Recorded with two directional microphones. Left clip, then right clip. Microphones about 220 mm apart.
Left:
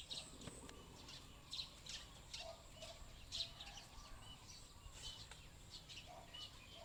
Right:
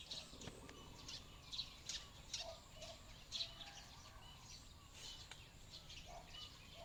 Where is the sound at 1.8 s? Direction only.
30° right (ahead or behind).